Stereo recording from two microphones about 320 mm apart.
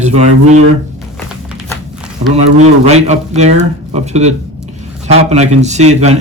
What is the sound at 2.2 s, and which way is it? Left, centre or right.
Speech, right.